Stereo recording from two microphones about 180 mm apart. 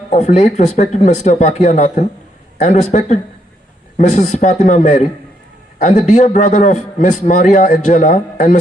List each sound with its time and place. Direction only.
0.1 s a man's voice: 40° left (ahead or behind)